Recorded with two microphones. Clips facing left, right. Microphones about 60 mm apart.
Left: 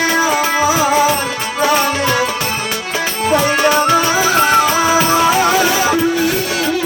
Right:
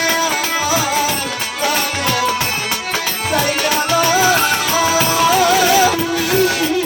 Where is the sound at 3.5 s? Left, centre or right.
Left.